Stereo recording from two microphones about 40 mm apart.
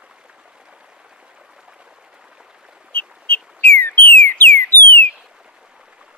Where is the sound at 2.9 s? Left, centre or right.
Left.